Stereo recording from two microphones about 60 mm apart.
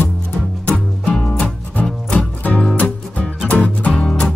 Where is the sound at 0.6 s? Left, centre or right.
Left.